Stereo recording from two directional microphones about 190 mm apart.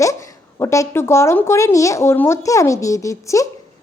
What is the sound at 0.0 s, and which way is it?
A woman's voice, 15° left (ahead or behind).